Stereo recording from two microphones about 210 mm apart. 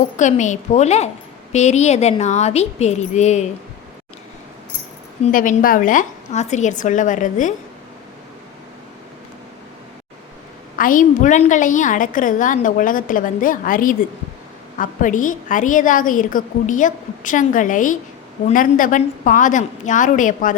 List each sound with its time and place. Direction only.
0.2 s a woman's voice: 35° left (ahead or behind)
5.2 s a woman's voice: 40° left (ahead or behind)
10.8 s a woman's voice: 40° left (ahead or behind)